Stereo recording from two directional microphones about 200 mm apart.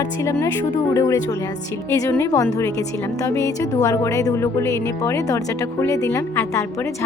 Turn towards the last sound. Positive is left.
turn(degrees=15)  # may be behind; listen again after turning